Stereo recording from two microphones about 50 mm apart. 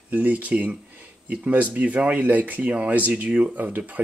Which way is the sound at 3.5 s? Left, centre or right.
Right.